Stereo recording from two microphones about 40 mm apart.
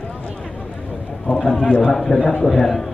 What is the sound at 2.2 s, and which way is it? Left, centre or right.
Speech, left.